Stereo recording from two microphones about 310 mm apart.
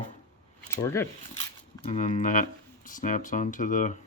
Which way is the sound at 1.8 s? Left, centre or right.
Left.